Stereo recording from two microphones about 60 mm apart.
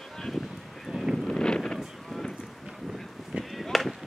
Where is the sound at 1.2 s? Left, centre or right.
Centre.